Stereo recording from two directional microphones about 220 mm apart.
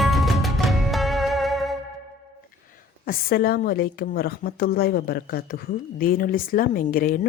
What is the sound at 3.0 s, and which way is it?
A woman's voice, 40° left (ahead or behind).